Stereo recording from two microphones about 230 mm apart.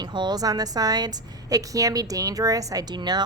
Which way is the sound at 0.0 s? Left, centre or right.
Centre.